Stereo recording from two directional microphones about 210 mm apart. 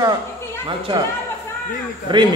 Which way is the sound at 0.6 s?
25° right (ahead or behind).